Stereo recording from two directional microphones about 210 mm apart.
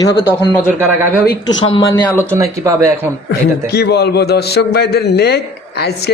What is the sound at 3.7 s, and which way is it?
A man's voice, 50° left (ahead or behind).